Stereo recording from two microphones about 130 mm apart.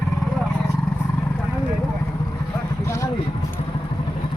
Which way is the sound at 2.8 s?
20° left (ahead or behind).